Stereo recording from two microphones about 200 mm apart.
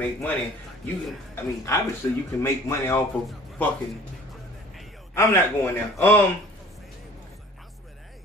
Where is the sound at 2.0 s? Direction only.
15° left (ahead or behind).